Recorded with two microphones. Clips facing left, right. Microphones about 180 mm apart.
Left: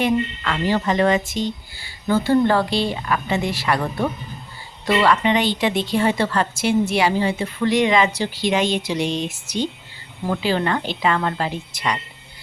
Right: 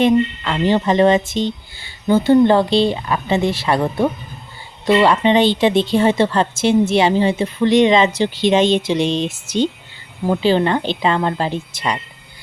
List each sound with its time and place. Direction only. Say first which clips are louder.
0.0 s a woman's voice: right 6 dB; 25° right (ahead or behind)